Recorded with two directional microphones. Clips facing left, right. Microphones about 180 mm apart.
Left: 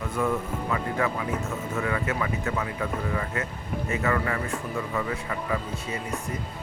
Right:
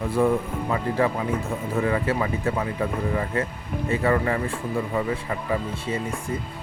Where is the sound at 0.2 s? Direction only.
30° right (ahead or behind).